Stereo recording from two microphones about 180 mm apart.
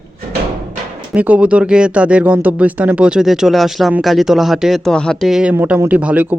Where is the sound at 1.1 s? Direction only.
10° right (ahead or behind).